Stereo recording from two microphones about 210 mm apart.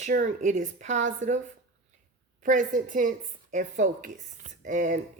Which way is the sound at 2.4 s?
40° right (ahead or behind).